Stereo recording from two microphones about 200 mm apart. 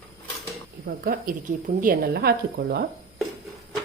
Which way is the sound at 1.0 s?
45° right (ahead or behind).